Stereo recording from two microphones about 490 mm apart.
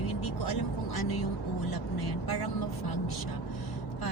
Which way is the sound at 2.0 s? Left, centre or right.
Left.